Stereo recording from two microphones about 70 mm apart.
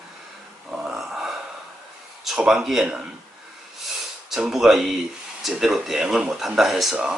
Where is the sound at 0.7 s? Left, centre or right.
Centre.